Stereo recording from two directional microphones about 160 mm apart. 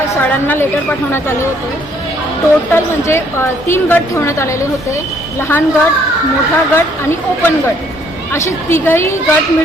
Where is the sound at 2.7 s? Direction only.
15° left (ahead or behind).